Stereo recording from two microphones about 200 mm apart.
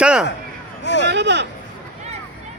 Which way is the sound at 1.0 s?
60° right (ahead or behind).